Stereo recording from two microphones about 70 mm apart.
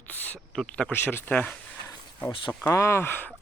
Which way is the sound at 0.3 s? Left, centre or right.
Centre.